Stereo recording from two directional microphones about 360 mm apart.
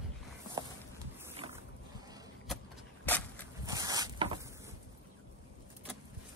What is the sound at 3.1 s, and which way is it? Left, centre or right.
Walk, centre.